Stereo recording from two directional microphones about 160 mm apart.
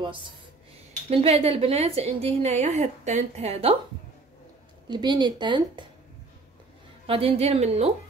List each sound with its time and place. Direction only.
0.0 s a woman's voice: 30° right (ahead or behind)
4.8 s a woman's voice: 30° right (ahead or behind)
7.1 s a woman's voice: 35° right (ahead or behind)